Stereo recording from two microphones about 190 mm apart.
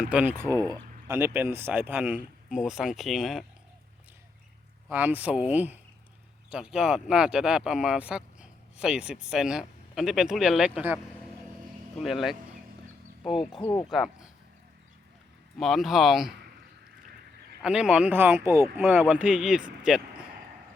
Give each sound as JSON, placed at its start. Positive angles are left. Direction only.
{"t": 0.0, "sound": "speech", "side_deg": -5}
{"t": 4.9, "sound": "speech", "side_deg": -10}
{"t": 13.2, "sound": "speech", "side_deg": 25}
{"t": 13.9, "sound": "speech", "side_deg": 0}
{"t": 15.5, "sound": "speech", "side_deg": 0}
{"t": 17.6, "sound": "speech", "side_deg": -5}